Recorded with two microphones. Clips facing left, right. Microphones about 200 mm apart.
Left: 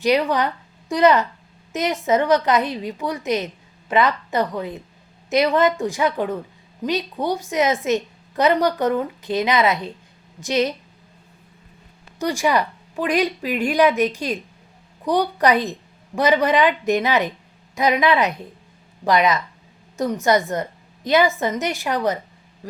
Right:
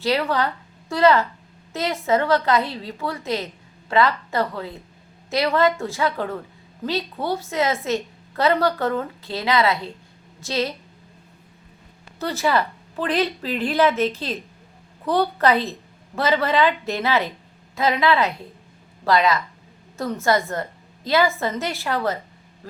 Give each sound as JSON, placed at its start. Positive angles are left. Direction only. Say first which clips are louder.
{"t": 0.0, "sound": "a woman's voice", "louder": "left 3 dB", "side_deg": 15}
{"t": 12.2, "sound": "a woman's voice", "louder": "left 2 dB", "side_deg": 15}